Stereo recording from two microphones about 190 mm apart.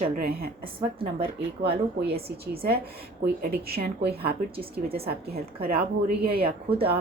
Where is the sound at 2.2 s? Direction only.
55° right (ahead or behind).